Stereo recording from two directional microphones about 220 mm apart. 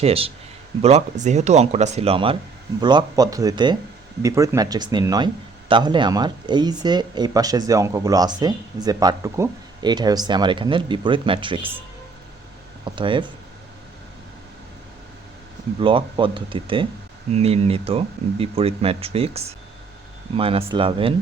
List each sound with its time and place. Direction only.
0.0 s speech: 25° right (ahead or behind)
12.8 s speech: 20° right (ahead or behind)
15.8 s speech: 25° right (ahead or behind)